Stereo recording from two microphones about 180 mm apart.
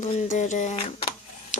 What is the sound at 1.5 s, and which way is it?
Printer, 45° left (ahead or behind).